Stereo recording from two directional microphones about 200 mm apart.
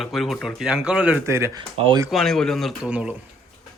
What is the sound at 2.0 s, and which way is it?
A man's voice, centre (ahead or behind).